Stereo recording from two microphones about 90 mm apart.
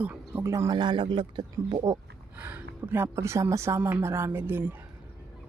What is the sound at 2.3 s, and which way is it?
Speech, 25° right (ahead or behind).